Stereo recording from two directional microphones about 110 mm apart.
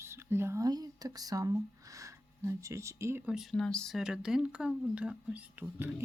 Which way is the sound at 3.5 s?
5° left (ahead or behind).